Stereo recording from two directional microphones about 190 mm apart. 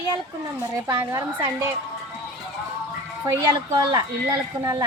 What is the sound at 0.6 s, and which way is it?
Speech, 20° right (ahead or behind).